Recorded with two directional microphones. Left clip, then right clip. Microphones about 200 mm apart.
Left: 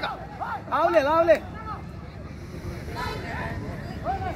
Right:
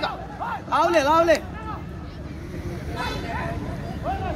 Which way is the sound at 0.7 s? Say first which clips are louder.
Right 2 dB; 45° left (ahead or behind).